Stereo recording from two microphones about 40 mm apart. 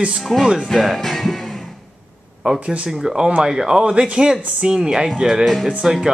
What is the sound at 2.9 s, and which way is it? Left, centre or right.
Speech, centre.